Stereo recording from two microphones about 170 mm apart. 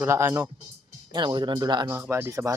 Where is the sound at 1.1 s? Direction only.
25° right (ahead or behind).